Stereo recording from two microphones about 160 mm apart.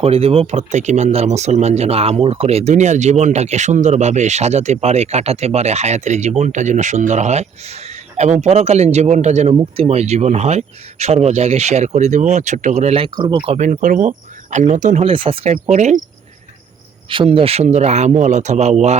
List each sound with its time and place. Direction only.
0.0 s speech: 40° right (ahead or behind)
13.1 s speech: 30° right (ahead or behind)
13.6 s speech: 55° right (ahead or behind)
15.0 s speech: 35° right (ahead or behind)
17.1 s speech: 35° right (ahead or behind)